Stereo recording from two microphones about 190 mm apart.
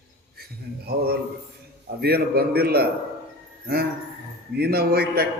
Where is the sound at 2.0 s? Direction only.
55° right (ahead or behind).